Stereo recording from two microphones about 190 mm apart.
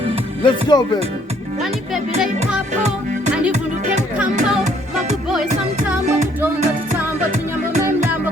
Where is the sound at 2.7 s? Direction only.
35° right (ahead or behind).